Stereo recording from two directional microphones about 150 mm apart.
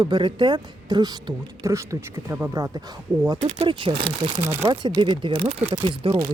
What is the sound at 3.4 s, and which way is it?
Speech, 45° right (ahead or behind).